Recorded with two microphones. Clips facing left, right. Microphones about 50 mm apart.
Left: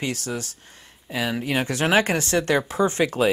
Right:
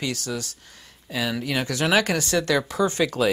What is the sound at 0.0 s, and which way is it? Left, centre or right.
Speech, left.